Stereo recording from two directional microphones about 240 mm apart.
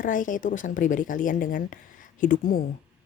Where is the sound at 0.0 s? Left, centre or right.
Left.